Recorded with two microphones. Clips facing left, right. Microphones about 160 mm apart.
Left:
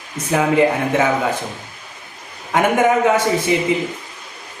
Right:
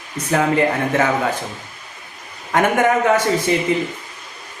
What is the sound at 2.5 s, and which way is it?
A man's voice, 10° left (ahead or behind).